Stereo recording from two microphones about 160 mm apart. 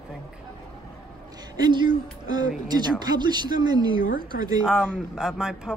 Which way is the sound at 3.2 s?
25° right (ahead or behind).